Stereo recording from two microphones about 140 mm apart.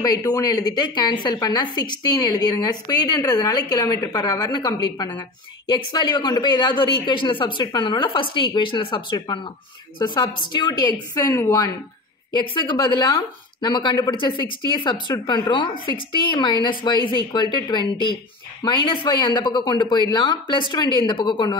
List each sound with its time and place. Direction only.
0.0 s a woman's voice: 25° left (ahead or behind)